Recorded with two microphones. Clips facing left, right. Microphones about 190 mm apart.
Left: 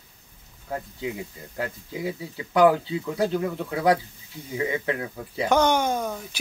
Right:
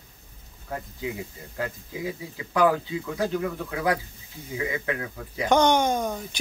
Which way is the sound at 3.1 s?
25° left (ahead or behind).